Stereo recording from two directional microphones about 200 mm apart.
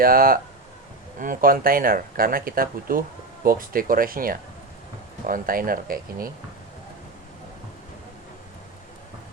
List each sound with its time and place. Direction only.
0.0 s speech: 45° right (ahead or behind)